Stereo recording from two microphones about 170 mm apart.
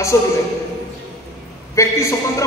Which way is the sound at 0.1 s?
15° left (ahead or behind).